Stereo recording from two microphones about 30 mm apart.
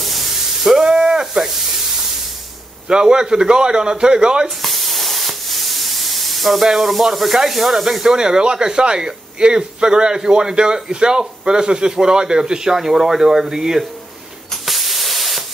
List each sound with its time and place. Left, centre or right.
0.0 s spray: centre
0.8 s a sound: right
2.9 s a man's voice: right
4.6 s spray: centre
8.2 s a man's voice: right
14.5 s spray: centre